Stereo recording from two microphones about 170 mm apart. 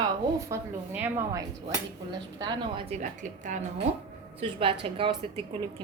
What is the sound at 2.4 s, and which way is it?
Dishes, 30° right (ahead or behind).